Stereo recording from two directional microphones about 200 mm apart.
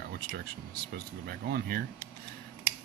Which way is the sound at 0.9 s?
50° right (ahead or behind).